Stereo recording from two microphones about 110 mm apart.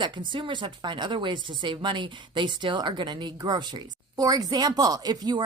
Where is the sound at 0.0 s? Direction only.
45° right (ahead or behind).